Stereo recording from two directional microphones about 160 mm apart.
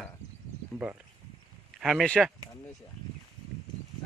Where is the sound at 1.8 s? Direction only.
5° left (ahead or behind).